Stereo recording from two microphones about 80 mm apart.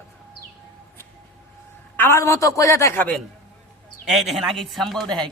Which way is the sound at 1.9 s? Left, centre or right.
Left.